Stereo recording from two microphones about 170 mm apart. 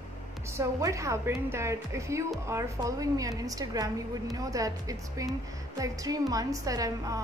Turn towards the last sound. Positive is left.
turn(degrees=-20)  # may be behind; listen again after turning